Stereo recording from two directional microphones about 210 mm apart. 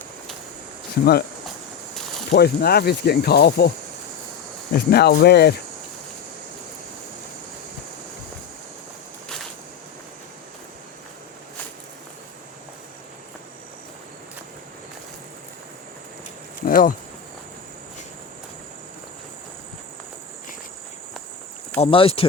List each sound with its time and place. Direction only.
1.0 s speech: 45° left (ahead or behind)
2.3 s speech: 50° left (ahead or behind)
4.7 s speech: 50° left (ahead or behind)
16.6 s insect: 40° left (ahead or behind)
21.8 s speech: 25° left (ahead or behind)